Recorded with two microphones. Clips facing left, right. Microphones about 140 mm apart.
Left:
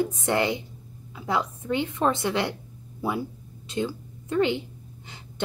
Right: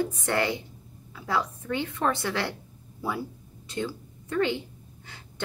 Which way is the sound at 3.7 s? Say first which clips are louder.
Left 3 dB; 20° left (ahead or behind).